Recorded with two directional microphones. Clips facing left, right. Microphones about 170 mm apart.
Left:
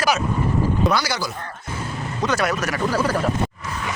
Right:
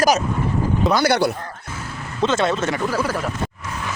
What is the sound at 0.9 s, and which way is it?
Speech, 60° right (ahead or behind).